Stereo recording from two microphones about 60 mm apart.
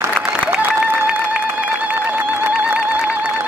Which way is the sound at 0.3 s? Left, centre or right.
Right.